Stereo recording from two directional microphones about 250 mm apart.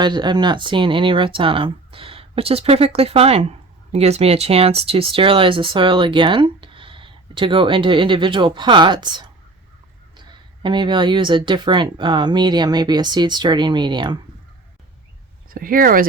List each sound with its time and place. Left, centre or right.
0.0 s speech: centre
15.4 s speech: right